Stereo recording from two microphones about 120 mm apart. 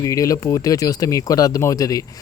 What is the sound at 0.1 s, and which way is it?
Speech, 30° left (ahead or behind).